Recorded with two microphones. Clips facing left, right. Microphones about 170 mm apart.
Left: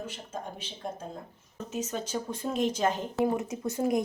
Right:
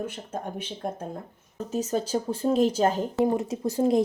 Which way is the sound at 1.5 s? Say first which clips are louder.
Right 6 dB; 35° right (ahead or behind).